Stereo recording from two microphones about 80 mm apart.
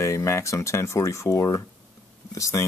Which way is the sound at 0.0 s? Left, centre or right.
Left.